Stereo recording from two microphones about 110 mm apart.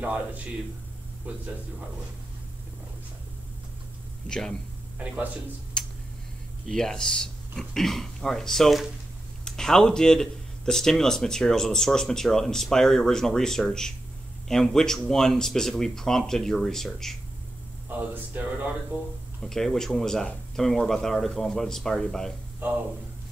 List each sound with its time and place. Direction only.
0.0 s speech: 10° right (ahead or behind)
4.3 s speech: 5° left (ahead or behind)
4.9 s speech: 15° right (ahead or behind)
6.6 s speech: 5° left (ahead or behind)
17.8 s speech: 20° right (ahead or behind)
19.4 s speech: 5° left (ahead or behind)